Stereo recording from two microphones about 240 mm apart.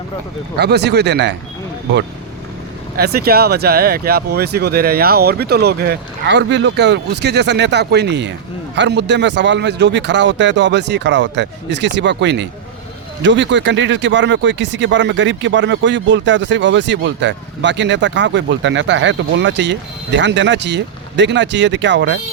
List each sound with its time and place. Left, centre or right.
0.6 s speech: right
2.9 s speech: right